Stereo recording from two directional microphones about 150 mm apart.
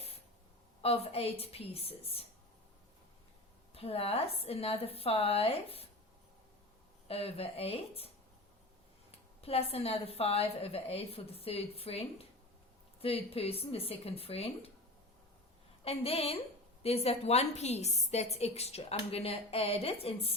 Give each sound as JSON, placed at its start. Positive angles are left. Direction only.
{"t": 0.8, "sound": "a woman's voice", "side_deg": 40}
{"t": 3.8, "sound": "a woman's voice", "side_deg": 40}
{"t": 7.1, "sound": "a woman's voice", "side_deg": 40}
{"t": 9.4, "sound": "a woman's voice", "side_deg": 40}
{"t": 15.8, "sound": "a woman's voice", "side_deg": 40}